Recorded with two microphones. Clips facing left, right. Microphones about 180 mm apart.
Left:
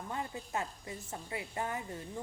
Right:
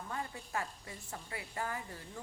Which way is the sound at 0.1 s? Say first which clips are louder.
Left 2 dB; 20° left (ahead or behind).